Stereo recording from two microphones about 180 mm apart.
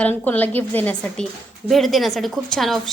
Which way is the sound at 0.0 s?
10° left (ahead or behind).